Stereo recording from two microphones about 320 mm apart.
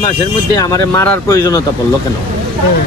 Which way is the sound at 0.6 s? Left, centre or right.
Centre.